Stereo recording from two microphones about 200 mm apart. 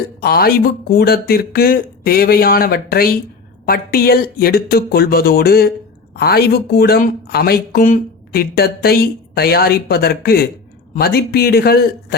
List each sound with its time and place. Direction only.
0.2 s speech: 50° left (ahead or behind)